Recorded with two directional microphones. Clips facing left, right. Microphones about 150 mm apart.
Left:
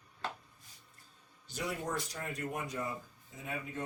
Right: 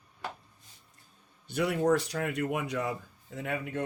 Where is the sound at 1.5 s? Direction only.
65° right (ahead or behind).